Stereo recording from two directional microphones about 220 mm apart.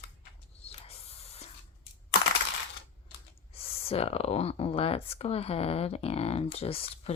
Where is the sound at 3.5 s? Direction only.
25° left (ahead or behind).